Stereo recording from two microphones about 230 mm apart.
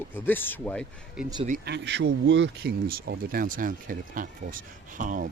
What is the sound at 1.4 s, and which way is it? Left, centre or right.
Speech, right.